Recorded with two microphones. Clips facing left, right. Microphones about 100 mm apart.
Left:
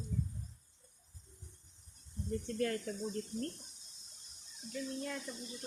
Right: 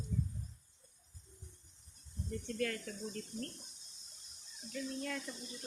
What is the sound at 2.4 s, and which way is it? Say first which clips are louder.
Speech: left 2 dB; 30° left (ahead or behind).